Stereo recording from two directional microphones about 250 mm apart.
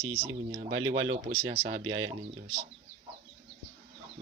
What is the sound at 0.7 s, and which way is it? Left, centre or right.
Speech, right.